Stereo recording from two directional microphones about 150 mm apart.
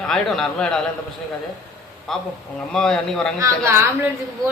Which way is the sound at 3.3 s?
20° right (ahead or behind).